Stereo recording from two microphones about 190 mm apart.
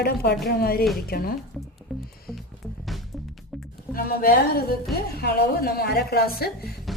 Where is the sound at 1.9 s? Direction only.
Centre (ahead or behind).